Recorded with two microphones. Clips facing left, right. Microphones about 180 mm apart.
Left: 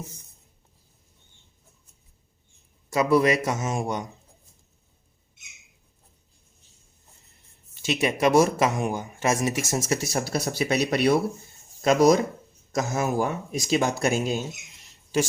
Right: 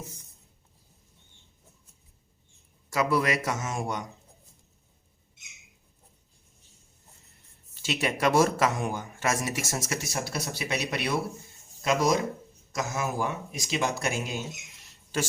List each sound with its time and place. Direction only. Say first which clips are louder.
2.9 s a man's voice: left 6 dB; 20° left (ahead or behind)
7.8 s speech: left 4 dB; 15° left (ahead or behind)
9.9 s speech: left 8 dB; 35° left (ahead or behind)